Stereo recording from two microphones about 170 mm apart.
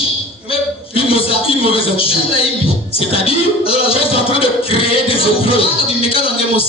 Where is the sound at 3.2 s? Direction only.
35° left (ahead or behind).